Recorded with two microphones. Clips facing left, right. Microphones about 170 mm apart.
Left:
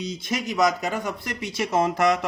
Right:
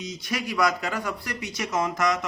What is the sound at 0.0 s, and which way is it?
Speech, 25° left (ahead or behind).